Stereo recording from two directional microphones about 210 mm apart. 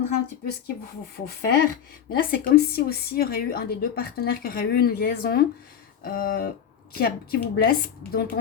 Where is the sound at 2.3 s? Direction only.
45° left (ahead or behind).